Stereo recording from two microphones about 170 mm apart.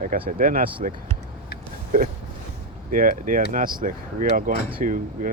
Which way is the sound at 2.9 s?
55° right (ahead or behind).